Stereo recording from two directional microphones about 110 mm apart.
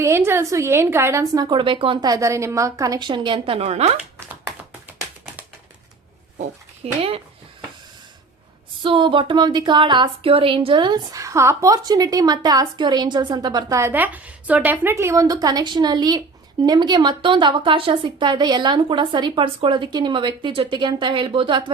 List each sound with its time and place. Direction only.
0.0 s a woman's voice: 25° right (ahead or behind)
1.5 s speech: 50° right (ahead or behind)
2.0 s a woman's voice: 30° right (ahead or behind); by 3.9 s 75° right (ahead or behind)
6.4 s speech: 65° right (ahead or behind)
8.8 s speech: 50° right (ahead or behind)